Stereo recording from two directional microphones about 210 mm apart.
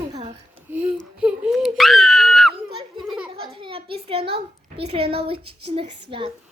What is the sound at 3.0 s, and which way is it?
Children playing, centre (ahead or behind).